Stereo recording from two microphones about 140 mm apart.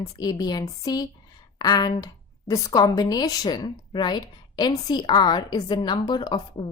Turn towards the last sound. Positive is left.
turn(degrees=30)  # may be behind; listen again after turning